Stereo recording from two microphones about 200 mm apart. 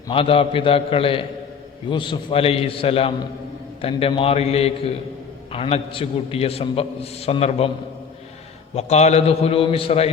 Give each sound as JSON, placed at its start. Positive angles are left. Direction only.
{"t": 0.1, "sound": "a man's voice", "side_deg": 25}
{"t": 8.7, "sound": "a man's voice", "side_deg": 35}